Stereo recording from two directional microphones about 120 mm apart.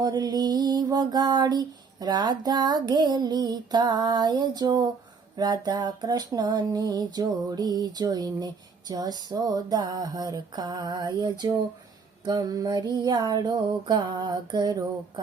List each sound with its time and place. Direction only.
0.0 s music: 35° right (ahead or behind)